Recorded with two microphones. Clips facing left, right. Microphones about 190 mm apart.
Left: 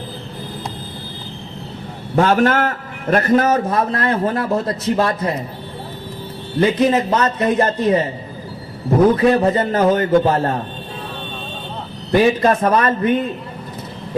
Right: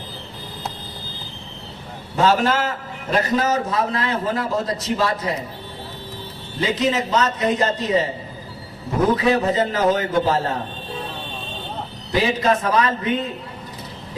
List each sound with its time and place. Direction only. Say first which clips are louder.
2.1 s a man's voice: left 3 dB; 55° left (ahead or behind)
6.6 s a man's voice: left 6 dB; 55° left (ahead or behind)
8.9 s a man's voice: left 5 dB; 55° left (ahead or behind)
12.1 s a man's voice: left 5 dB; 55° left (ahead or behind)